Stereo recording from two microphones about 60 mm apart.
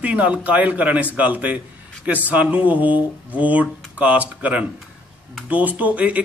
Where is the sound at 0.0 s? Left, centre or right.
Right.